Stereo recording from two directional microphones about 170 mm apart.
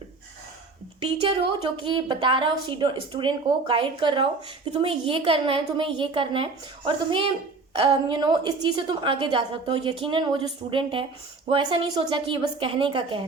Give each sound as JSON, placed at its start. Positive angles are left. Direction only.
{"t": 1.3, "sound": "a woman's voice", "side_deg": -30}